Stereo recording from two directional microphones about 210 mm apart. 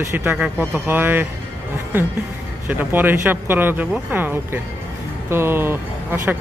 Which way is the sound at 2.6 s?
10° right (ahead or behind).